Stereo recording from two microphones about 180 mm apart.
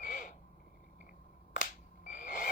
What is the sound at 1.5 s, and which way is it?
Finger snapping, 50° left (ahead or behind).